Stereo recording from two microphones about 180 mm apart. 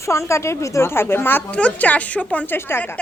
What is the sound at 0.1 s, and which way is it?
A woman's voice, 15° left (ahead or behind).